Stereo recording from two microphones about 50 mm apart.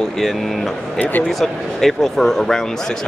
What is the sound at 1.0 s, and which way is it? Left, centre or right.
Speech, left.